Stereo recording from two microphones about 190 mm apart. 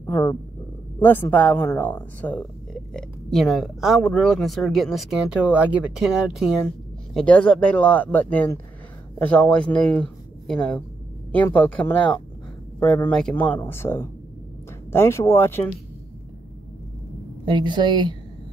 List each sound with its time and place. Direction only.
0.0 s speech: 15° left (ahead or behind)
17.5 s a woman's voice: 25° right (ahead or behind)